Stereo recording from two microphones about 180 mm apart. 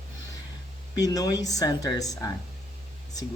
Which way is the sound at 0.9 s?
20° left (ahead or behind).